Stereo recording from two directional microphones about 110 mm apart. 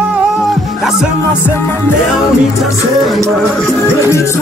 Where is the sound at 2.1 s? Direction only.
Centre (ahead or behind).